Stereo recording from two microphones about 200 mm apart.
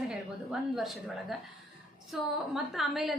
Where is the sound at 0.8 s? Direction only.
Centre (ahead or behind).